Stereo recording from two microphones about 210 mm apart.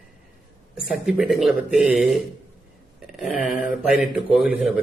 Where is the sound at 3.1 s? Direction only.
5° right (ahead or behind).